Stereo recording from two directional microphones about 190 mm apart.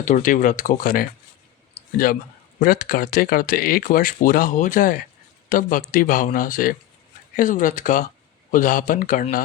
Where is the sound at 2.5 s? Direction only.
50° left (ahead or behind).